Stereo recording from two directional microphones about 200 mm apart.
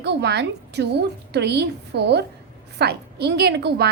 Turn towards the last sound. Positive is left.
turn(degrees=-55)  # may be behind; listen again after turning